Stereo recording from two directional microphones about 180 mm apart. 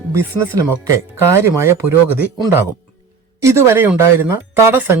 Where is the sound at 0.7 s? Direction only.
15° right (ahead or behind).